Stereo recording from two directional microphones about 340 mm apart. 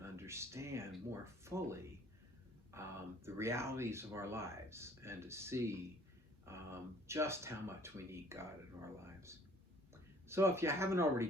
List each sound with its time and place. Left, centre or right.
0.0 s speech: centre